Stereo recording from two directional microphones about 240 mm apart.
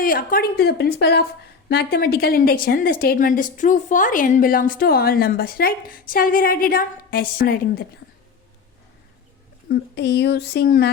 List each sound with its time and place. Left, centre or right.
0.0 s a woman's voice: left
9.6 s speech: left